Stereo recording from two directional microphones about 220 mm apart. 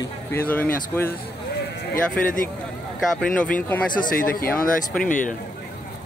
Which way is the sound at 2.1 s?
40° left (ahead or behind).